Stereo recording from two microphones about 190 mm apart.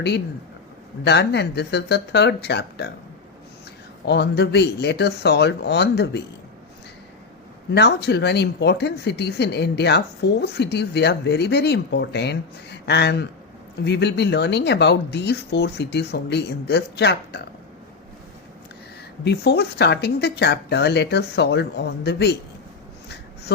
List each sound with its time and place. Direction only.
1.0 s speech: 60° left (ahead or behind)
4.0 s speech: 60° left (ahead or behind)
7.7 s speech: 60° left (ahead or behind)
19.2 s speech: 60° left (ahead or behind)